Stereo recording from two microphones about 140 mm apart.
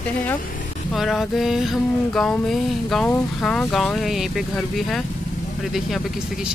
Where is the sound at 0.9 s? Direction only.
Centre (ahead or behind).